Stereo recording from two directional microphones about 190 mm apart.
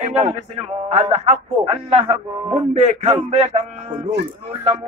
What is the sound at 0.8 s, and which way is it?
A man's voice, 35° right (ahead or behind).